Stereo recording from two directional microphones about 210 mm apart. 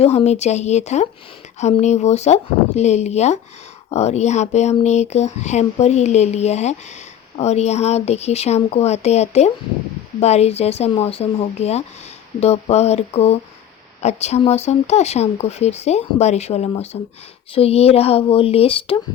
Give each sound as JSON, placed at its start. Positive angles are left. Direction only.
{"t": 0.0, "sound": "speech", "side_deg": 30}